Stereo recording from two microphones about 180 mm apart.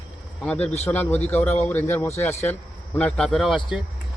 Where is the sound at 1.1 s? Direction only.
35° left (ahead or behind).